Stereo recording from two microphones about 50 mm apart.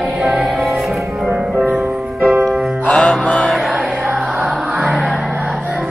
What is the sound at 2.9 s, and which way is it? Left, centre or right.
Music, centre.